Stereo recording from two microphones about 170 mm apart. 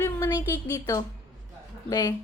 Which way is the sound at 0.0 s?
15° left (ahead or behind).